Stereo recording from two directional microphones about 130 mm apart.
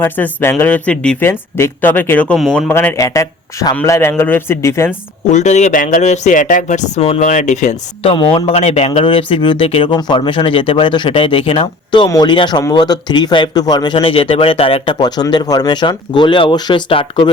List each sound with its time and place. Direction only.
0.0 s speech: 15° left (ahead or behind)
2.6 s a man's voice: 20° left (ahead or behind)
5.3 s speech: 65° left (ahead or behind)
7.0 s speech: 50° left (ahead or behind)
7.3 s speech: 70° left (ahead or behind)
8.0 s speech: 40° left (ahead or behind)
9.9 s speech: 35° left (ahead or behind)